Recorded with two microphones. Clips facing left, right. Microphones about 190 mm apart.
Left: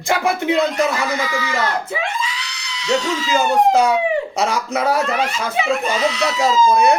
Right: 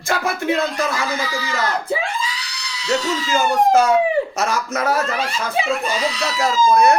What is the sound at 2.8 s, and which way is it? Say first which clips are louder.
Speech: left 1 dB; 15° left (ahead or behind).